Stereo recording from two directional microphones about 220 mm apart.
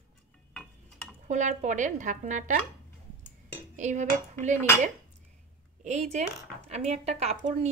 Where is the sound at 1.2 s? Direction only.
35° right (ahead or behind).